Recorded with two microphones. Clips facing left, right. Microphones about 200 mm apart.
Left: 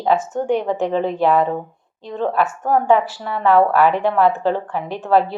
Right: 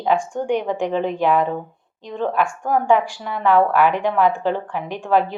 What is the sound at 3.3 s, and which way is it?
A woman's voice, 35° left (ahead or behind).